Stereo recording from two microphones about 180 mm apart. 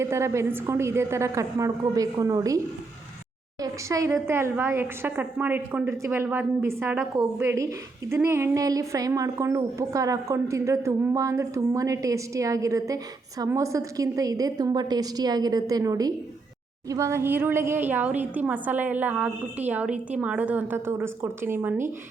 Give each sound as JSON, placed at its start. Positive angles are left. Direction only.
{"t": 0.0, "sound": "a woman's voice", "side_deg": -15}
{"t": 3.6, "sound": "a woman's voice", "side_deg": -20}